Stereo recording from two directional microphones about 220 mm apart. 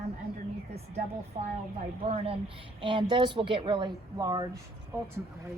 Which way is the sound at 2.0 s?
25° right (ahead or behind).